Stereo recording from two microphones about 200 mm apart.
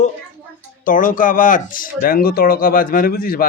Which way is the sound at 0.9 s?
40° left (ahead or behind).